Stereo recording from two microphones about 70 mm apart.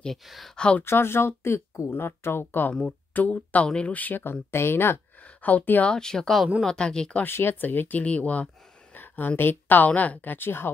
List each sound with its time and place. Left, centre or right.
0.0 s speech: centre
0.6 s speech: centre
0.8 s speech: left
5.9 s speech: centre
7.2 s speech: left
8.9 s a sound: left
9.4 s speech: left